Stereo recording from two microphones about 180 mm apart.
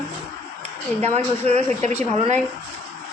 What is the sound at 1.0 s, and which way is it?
Speech, 35° right (ahead or behind).